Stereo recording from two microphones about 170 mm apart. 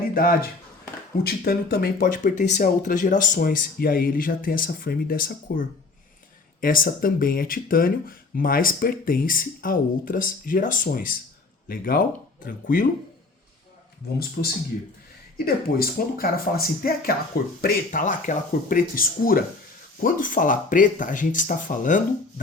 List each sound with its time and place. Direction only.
0.1 s speech: 60° left (ahead or behind)
15.4 s speech: 60° left (ahead or behind)